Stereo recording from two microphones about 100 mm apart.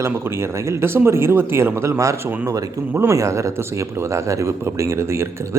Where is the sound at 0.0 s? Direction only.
25° right (ahead or behind).